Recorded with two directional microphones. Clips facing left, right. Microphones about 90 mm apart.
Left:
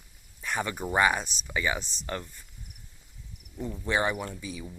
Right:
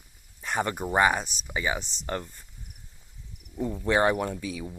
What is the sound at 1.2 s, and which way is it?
Speech, 20° right (ahead or behind).